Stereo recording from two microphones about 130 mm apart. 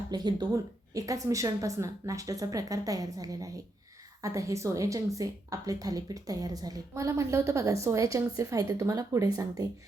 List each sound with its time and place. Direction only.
0.1 s a woman's voice: 35° right (ahead or behind)